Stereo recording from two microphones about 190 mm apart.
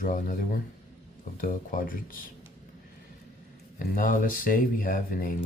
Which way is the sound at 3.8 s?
45° left (ahead or behind).